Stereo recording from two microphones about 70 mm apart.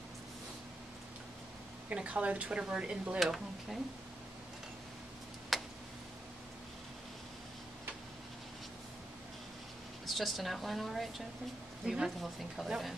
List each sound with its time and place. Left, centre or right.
1.9 s speech: centre
3.2 s a woman's voice: centre
5.5 s tick: centre
10.0 s a woman's voice: centre